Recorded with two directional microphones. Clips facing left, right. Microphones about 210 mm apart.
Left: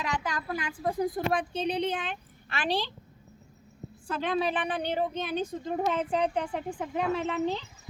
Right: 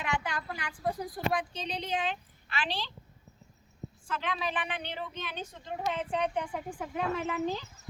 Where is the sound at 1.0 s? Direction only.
50° left (ahead or behind).